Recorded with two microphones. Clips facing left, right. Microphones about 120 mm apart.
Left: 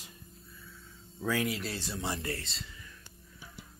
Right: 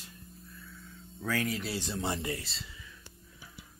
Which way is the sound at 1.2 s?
10° left (ahead or behind).